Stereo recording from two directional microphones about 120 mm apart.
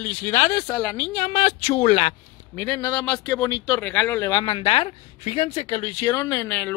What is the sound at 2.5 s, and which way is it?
Speech, 30° left (ahead or behind).